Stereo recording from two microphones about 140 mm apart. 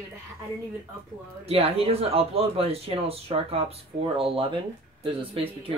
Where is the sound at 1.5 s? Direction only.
45° right (ahead or behind).